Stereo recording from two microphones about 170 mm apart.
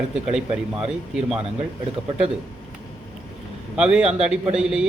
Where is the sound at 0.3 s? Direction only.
5° right (ahead or behind).